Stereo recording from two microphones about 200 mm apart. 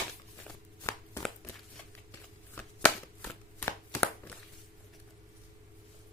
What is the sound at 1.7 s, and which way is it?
Shuffling cards, 10° left (ahead or behind).